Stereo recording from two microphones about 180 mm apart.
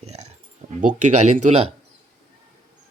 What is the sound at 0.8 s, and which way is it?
Speech, 45° right (ahead or behind).